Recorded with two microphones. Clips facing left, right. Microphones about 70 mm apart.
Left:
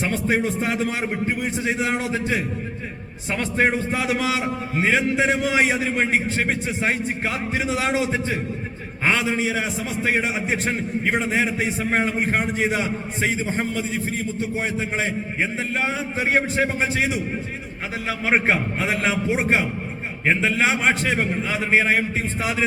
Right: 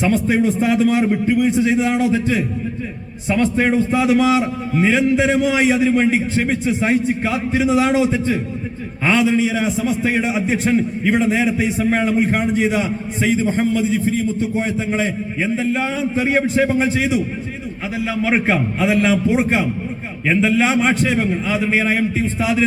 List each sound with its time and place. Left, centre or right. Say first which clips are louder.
0.1 s a man's voice: right 6 dB; left
15.5 s a man's voice: right 5 dB; left
18.2 s a man's voice: right 3 dB; left
20.2 s a man's voice: right 4 dB; left